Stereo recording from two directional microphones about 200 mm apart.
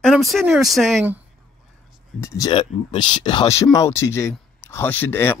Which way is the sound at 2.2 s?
15° left (ahead or behind).